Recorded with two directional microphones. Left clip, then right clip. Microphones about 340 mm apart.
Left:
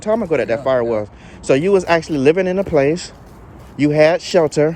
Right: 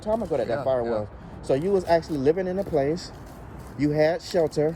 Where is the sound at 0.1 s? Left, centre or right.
Left.